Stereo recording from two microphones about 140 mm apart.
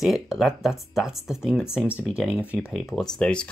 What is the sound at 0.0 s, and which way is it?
Speech, centre (ahead or behind).